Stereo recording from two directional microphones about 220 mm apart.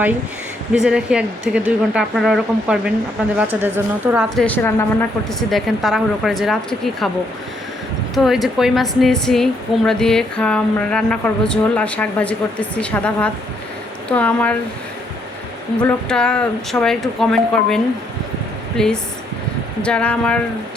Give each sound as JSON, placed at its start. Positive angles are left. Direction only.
{"t": 0.7, "sound": "a woman's voice", "side_deg": -5}
{"t": 4.4, "sound": "a woman's voice", "side_deg": 10}
{"t": 8.1, "sound": "a woman's voice", "side_deg": 0}
{"t": 15.8, "sound": "a woman's voice", "side_deg": 5}
{"t": 18.8, "sound": "a woman's voice", "side_deg": 5}